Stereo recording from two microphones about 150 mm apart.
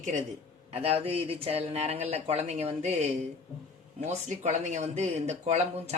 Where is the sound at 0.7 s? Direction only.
40° right (ahead or behind).